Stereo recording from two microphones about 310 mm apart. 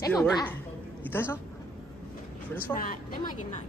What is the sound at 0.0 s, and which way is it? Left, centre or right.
A man's voice, centre.